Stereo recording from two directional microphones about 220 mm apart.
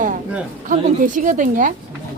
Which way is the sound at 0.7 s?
35° right (ahead or behind).